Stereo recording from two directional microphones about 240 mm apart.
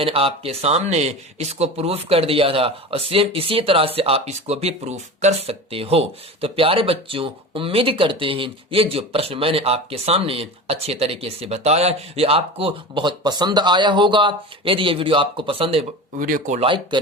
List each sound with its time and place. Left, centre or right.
0.0 s speech: right